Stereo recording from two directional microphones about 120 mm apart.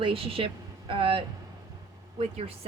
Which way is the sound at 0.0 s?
50° right (ahead or behind).